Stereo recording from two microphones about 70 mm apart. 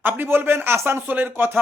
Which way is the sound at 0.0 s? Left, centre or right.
Right.